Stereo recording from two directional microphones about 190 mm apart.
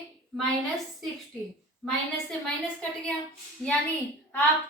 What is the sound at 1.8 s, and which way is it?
A woman's voice, centre (ahead or behind).